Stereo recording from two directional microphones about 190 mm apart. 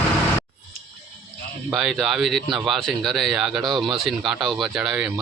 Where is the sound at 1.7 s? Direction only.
Centre (ahead or behind).